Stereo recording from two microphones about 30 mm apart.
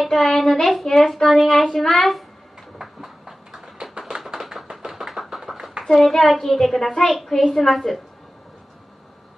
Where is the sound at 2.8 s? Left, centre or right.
Centre.